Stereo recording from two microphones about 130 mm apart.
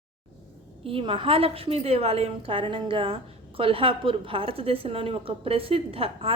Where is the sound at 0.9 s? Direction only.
45° right (ahead or behind).